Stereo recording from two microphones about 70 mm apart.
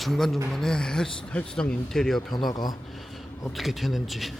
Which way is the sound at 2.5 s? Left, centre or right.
Left.